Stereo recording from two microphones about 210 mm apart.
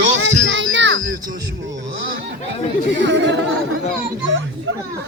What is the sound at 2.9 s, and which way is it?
Speech, 60° right (ahead or behind).